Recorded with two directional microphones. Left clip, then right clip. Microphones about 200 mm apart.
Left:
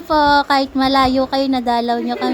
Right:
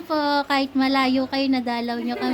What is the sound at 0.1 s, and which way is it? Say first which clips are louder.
Speech: left 8 dB; 15° left (ahead or behind).